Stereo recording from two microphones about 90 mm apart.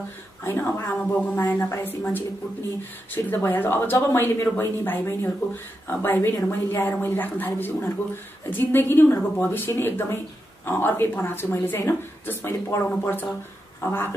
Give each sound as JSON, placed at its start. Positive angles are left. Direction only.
{"t": 0.4, "sound": "a woman's voice", "side_deg": 30}
{"t": 3.3, "sound": "a woman's voice", "side_deg": 20}